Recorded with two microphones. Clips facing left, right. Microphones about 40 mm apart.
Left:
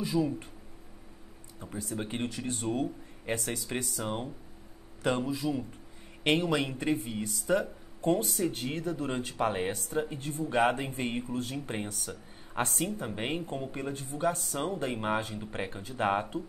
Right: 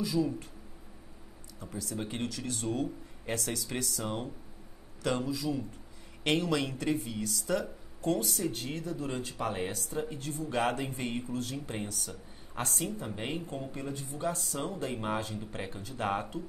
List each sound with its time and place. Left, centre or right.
0.0 s speech: left
1.6 s speech: left
9.9 s speech: left